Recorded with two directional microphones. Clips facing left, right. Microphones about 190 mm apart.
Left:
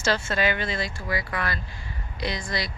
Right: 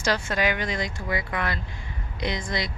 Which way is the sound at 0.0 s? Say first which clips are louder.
Even; 15° right (ahead or behind).